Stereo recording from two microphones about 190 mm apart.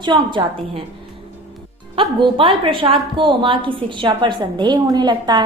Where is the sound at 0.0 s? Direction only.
25° right (ahead or behind).